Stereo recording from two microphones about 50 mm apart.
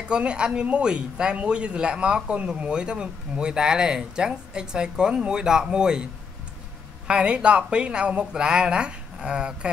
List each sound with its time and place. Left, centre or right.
0.1 s speech: centre
7.1 s speech: right